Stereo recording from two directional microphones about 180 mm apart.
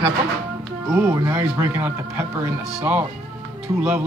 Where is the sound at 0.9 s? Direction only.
10° right (ahead or behind).